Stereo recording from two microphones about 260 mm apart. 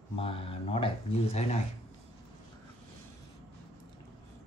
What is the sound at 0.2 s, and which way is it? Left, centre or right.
Speech, left.